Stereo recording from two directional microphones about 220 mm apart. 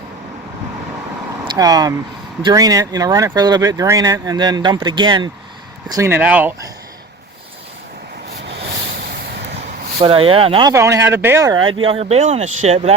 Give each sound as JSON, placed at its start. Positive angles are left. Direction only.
{"t": 1.5, "sound": "speech", "side_deg": -15}
{"t": 10.0, "sound": "speech", "side_deg": -25}